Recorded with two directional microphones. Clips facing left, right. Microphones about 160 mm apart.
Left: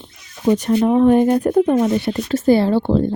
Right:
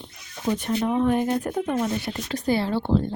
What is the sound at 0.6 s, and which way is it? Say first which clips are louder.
Speech: left 8 dB; 40° left (ahead or behind).